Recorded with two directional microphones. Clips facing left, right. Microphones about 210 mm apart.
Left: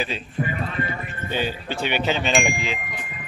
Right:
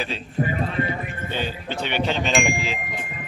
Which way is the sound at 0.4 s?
35° right (ahead or behind).